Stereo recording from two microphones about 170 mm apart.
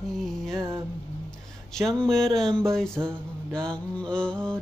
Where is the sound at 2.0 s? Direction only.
Centre (ahead or behind).